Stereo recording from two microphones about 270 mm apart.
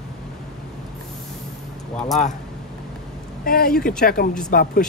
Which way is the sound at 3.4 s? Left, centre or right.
Left.